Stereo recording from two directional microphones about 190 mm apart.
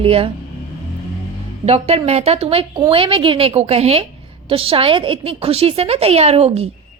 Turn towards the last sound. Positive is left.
turn(degrees=-35)  # may be behind; listen again after turning